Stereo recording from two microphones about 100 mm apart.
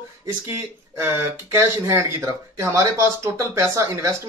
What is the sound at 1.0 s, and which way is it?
Speech, 25° right (ahead or behind).